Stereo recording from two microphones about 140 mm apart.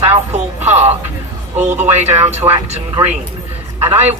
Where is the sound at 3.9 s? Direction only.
50° right (ahead or behind).